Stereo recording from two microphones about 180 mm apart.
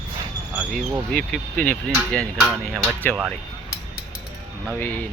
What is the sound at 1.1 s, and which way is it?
Speech, 5° left (ahead or behind).